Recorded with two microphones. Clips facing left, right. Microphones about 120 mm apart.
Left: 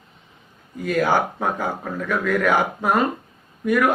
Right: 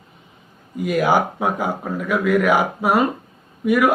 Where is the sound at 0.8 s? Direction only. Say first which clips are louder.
Right 2 dB; 10° right (ahead or behind).